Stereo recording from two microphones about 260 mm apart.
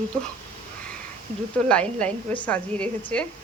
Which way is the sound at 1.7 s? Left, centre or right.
Centre.